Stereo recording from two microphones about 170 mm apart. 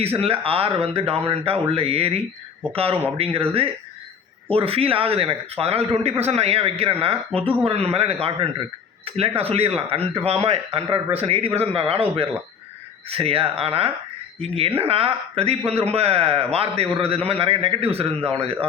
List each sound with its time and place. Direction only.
0.0 s speech: 35° right (ahead or behind)